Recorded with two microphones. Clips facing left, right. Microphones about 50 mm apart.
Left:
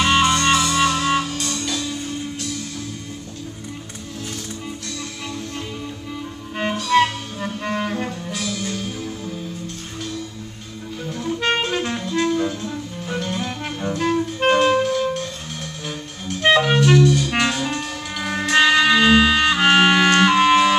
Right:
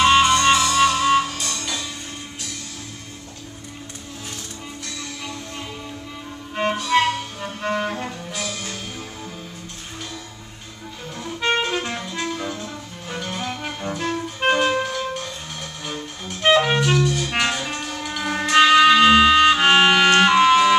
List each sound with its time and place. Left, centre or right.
0.0 s music: centre
6.7 s music: centre
7.6 s cello: centre
8.4 s music: right
11.1 s music: centre
16.4 s clarinet: centre
17.3 s music: centre
20.4 s music: centre